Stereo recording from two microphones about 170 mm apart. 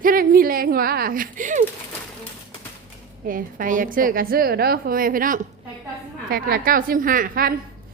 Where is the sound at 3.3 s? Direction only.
55° right (ahead or behind).